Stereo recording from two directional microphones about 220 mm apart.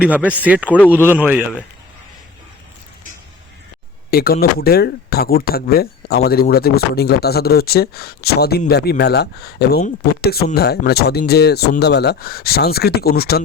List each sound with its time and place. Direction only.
0.0 s a man's voice: 5° right (ahead or behind)
4.1 s speech: 45° left (ahead or behind)